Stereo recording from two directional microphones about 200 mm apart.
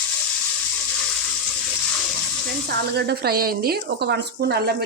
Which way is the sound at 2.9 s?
55° right (ahead or behind).